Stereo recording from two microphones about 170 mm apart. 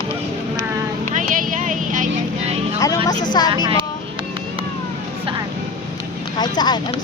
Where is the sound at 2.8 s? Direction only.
20° left (ahead or behind).